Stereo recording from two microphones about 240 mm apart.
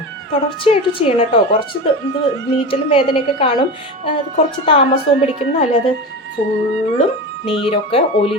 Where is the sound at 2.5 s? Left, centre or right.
Left.